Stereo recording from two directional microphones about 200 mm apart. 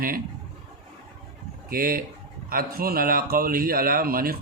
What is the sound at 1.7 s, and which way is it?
Speech, 45° right (ahead or behind).